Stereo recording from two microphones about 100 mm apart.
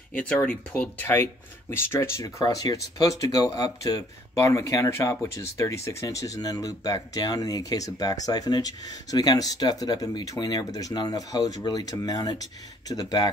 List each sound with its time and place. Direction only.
0.1 s speech: 15° left (ahead or behind)
1.0 s speech: 25° left (ahead or behind); by 13.3 s 40° left (ahead or behind)